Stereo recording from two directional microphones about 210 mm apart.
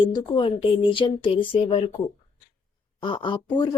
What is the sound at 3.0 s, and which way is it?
Speech, 25° left (ahead or behind).